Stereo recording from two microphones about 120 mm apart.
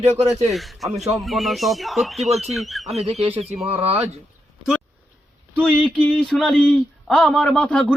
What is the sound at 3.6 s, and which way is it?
Speech, 60° right (ahead or behind).